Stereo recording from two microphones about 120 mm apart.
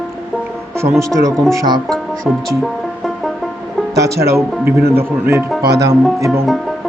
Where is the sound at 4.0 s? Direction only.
20° right (ahead or behind).